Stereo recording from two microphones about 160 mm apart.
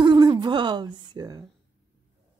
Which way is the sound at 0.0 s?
30° right (ahead or behind).